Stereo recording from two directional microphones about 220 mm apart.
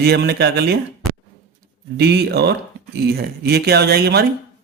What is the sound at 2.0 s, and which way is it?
A man's voice, 50° right (ahead or behind).